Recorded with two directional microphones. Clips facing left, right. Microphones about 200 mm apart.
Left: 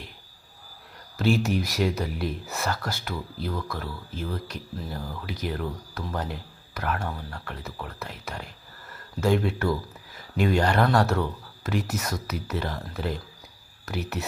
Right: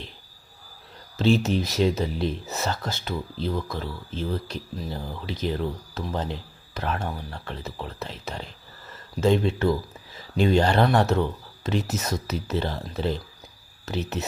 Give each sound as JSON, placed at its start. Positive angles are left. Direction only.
{"t": 1.1, "sound": "speech", "side_deg": -25}